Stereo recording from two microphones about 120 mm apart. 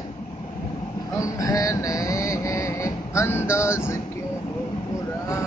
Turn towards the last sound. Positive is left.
turn(degrees=20)  # may be behind; listen again after turning